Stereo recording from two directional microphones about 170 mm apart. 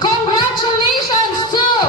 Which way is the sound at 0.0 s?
25° left (ahead or behind).